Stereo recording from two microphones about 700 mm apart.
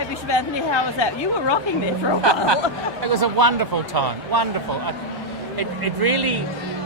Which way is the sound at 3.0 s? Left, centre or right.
Right.